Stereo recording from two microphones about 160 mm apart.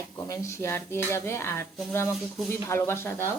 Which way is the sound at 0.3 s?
20° left (ahead or behind).